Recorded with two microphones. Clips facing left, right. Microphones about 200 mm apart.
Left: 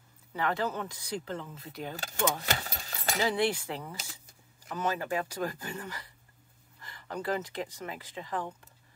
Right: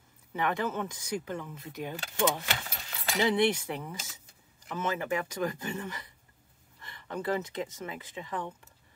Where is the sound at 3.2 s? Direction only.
20° right (ahead or behind).